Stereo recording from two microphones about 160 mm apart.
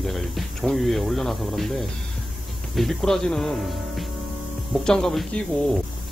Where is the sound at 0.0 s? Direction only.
Centre (ahead or behind).